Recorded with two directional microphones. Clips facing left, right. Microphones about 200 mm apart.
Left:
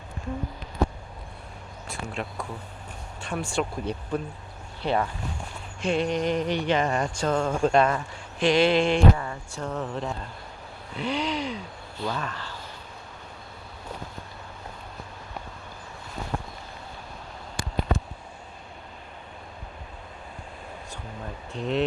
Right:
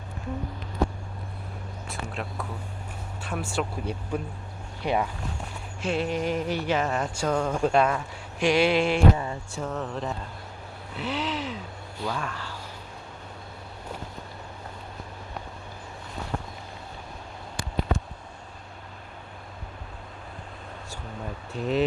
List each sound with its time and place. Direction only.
1.9 s speech: centre (ahead or behind)
9.1 s a sound: 20° right (ahead or behind)
9.6 s speech: centre (ahead or behind)
21.5 s speech: 5° right (ahead or behind)